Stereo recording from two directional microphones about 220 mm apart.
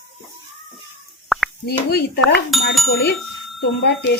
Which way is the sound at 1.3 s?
Centre (ahead or behind).